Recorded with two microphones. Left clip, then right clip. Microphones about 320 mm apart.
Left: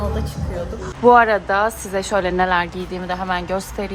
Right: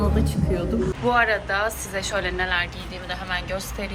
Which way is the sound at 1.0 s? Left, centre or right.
Centre.